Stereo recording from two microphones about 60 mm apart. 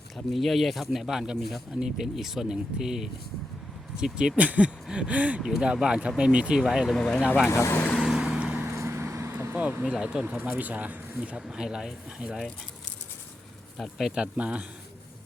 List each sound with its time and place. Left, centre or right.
0.3 s speech: centre
1.4 s speech: centre
1.7 s speech: centre
4.4 s speech: right
5.4 s speech: centre
6.9 s speech: centre
7.5 s speech: left
8.0 s vehicle: centre
8.6 s vehicle: right
9.6 s speech: right
9.8 s speech: centre
10.3 s speech: right
11.3 s speech: centre
14.3 s speech: centre